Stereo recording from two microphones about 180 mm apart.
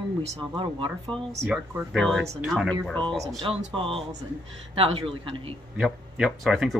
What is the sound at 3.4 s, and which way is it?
Speech, 30° right (ahead or behind).